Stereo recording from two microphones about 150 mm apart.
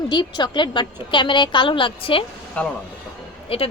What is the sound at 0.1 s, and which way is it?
A woman's voice, 30° left (ahead or behind).